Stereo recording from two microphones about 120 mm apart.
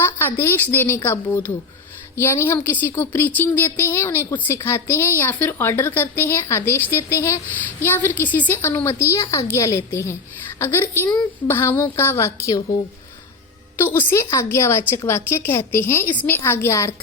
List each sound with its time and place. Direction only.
0.0 s a woman's voice: 15° left (ahead or behind)
13.7 s a woman's voice: 20° left (ahead or behind)